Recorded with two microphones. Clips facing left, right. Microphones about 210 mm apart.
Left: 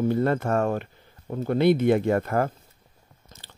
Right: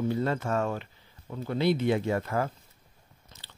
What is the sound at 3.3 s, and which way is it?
Biting, 45° left (ahead or behind).